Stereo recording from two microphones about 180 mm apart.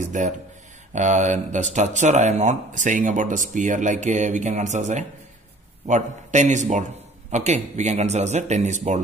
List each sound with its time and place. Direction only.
0.0 s a man's voice: 45° right (ahead or behind)